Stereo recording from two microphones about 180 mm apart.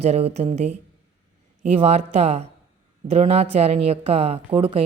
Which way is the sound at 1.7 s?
35° right (ahead or behind).